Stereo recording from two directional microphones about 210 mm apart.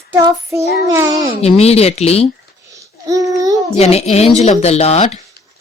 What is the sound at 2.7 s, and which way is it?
Babbling, 15° right (ahead or behind).